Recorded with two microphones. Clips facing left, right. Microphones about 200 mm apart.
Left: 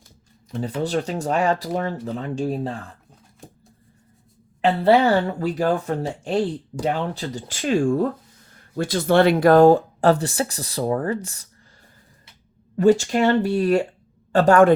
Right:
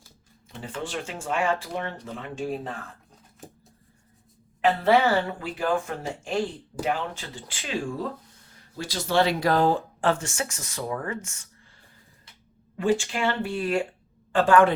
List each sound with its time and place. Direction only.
0.5 s speech: 40° left (ahead or behind)
4.6 s speech: 35° left (ahead or behind)
12.7 s a man's voice: 40° left (ahead or behind)